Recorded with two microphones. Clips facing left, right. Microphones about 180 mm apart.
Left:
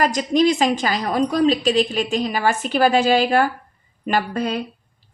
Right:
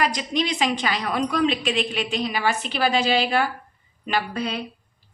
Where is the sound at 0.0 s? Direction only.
45° left (ahead or behind).